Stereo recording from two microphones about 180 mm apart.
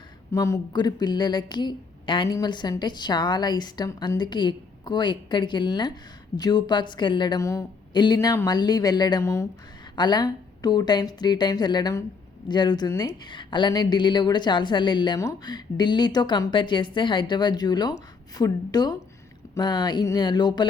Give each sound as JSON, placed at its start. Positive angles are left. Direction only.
{"t": 0.3, "sound": "speech", "side_deg": 15}